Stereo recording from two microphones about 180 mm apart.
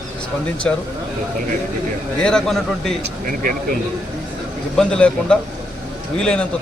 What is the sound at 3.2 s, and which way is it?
Speech, 50° right (ahead or behind).